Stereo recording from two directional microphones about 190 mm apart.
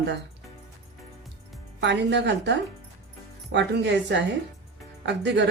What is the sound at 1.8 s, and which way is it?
Speech, 65° right (ahead or behind).